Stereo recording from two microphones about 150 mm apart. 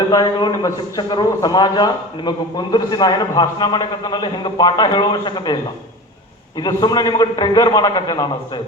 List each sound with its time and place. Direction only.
0.1 s a man's voice: 25° left (ahead or behind)
6.6 s a man's voice: 25° left (ahead or behind)